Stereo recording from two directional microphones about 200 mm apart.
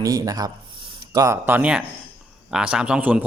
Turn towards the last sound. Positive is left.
turn(degrees=-5)  # may be behind; listen again after turning